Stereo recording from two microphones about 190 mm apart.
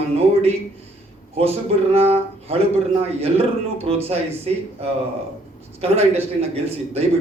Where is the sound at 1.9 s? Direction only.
30° right (ahead or behind).